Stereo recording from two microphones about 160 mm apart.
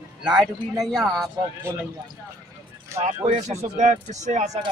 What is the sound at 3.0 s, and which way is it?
Speech, 40° right (ahead or behind).